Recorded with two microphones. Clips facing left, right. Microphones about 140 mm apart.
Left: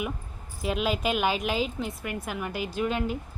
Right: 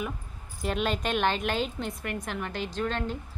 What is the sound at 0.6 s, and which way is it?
A woman's voice, 5° left (ahead or behind).